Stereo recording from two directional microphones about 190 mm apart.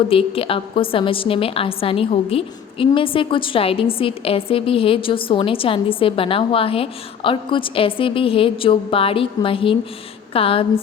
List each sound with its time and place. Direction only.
0.1 s a woman's voice: 30° left (ahead or behind)